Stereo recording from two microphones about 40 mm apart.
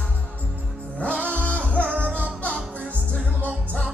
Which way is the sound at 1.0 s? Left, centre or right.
Left.